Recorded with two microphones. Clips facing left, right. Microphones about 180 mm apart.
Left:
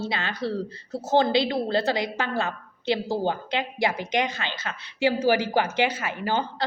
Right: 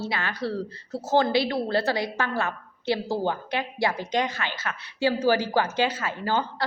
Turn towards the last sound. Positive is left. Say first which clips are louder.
# even
turn(degrees=20)  # may be behind; listen again after turning